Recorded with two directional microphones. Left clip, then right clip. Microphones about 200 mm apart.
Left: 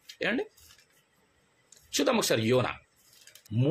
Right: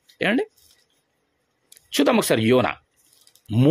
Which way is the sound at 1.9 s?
45° right (ahead or behind).